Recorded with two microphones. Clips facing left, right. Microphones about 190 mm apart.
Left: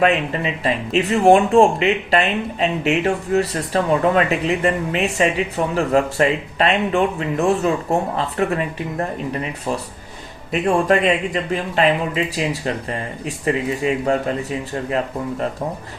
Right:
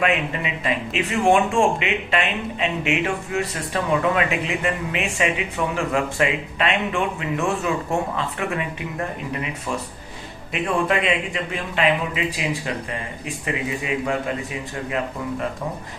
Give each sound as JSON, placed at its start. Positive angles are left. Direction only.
{"t": 0.0, "sound": "speech", "side_deg": 35}